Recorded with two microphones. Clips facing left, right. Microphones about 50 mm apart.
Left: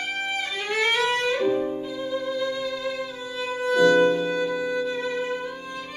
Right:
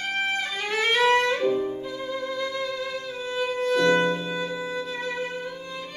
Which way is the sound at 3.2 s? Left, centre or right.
Centre.